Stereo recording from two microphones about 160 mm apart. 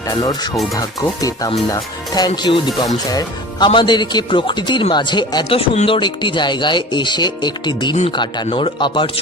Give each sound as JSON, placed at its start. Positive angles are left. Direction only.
{"t": 0.1, "sound": "speech", "side_deg": 25}